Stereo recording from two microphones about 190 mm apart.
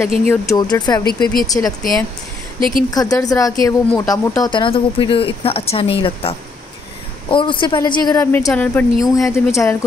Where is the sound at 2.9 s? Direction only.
20° left (ahead or behind).